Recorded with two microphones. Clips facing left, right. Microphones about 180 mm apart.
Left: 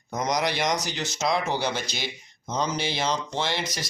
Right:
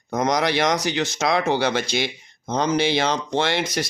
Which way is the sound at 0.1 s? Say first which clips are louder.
Right 5 dB; 60° right (ahead or behind).